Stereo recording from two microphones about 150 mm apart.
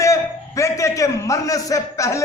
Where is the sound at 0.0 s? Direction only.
20° left (ahead or behind).